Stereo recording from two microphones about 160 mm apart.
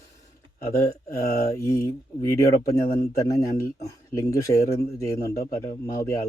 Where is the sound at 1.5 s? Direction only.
20° left (ahead or behind).